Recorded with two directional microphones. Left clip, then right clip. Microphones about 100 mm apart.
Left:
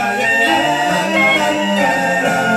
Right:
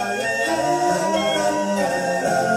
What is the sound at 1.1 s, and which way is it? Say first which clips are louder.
Music: left 6 dB; 20° right (ahead or behind).